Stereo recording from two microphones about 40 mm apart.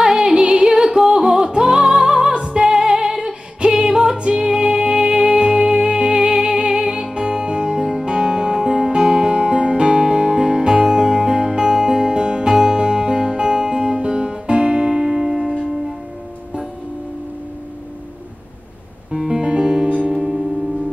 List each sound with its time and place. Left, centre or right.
0.0 s music: centre
19.1 s music: centre